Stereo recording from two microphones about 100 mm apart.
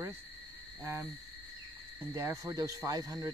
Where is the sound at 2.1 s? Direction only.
30° right (ahead or behind).